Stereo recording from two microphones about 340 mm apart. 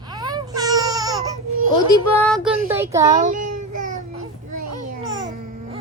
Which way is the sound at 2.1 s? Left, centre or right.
Centre.